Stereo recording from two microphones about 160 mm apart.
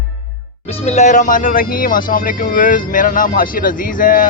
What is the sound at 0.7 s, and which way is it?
Speech, 40° left (ahead or behind).